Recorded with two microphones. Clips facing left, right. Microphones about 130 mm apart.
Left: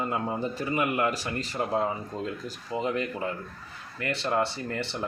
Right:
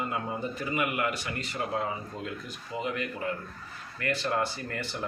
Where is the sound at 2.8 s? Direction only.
30° left (ahead or behind).